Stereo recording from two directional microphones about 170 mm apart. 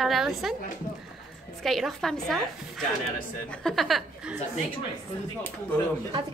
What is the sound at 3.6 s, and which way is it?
Speech, centre (ahead or behind).